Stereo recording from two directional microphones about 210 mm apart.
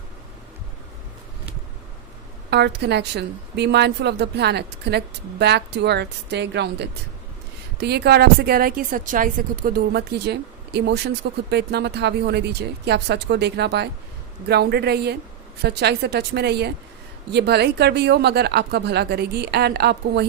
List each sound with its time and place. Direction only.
2.5 s a woman's voice: 55° right (ahead or behind)